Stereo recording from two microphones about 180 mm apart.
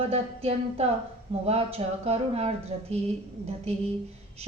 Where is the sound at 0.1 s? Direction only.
35° right (ahead or behind).